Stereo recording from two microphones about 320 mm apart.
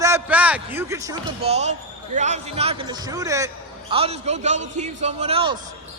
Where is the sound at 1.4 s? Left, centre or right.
Centre.